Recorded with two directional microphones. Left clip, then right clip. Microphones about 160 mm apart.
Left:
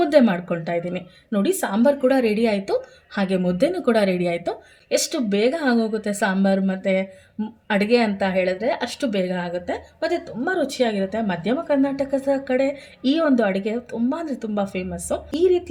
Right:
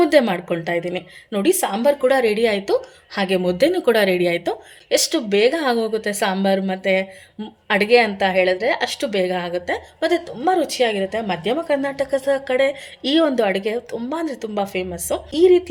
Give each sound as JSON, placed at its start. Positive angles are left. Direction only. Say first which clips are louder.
{"t": 0.1, "sound": "a woman's voice", "louder": "right 1 dB", "side_deg": -10}
{"t": 13.9, "sound": "speech", "louder": "left 2 dB", "side_deg": -35}
{"t": 14.3, "sound": "a woman's voice", "louder": "right 2 dB", "side_deg": -15}